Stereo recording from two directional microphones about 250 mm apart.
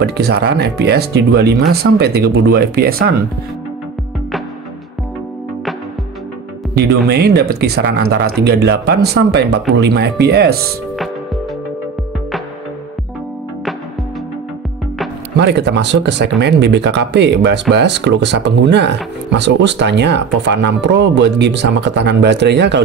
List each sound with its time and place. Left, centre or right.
0.0 s speech: right
6.7 s music: right
7.1 s speech: right
15.3 s speech: right